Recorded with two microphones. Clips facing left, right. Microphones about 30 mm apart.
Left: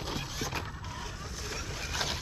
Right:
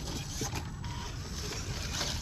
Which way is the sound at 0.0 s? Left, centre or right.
Left.